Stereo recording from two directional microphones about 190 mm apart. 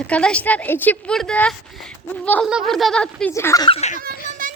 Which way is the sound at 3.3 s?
15° left (ahead or behind).